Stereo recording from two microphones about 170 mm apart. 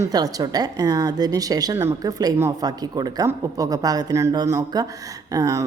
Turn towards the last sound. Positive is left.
turn(degrees=-20)  # may be behind; listen again after turning